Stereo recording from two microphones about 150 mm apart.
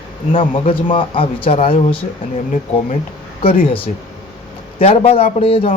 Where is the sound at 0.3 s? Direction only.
35° left (ahead or behind).